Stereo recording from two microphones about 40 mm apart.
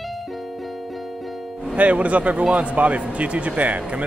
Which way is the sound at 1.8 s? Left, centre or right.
Right.